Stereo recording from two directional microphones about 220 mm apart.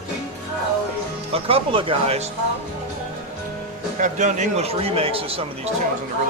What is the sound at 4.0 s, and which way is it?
A man's voice, 35° right (ahead or behind).